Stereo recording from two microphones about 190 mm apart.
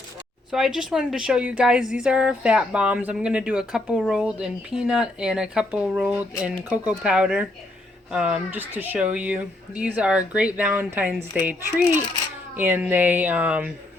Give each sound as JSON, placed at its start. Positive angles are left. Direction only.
{"t": 0.5, "sound": "speech", "side_deg": 0}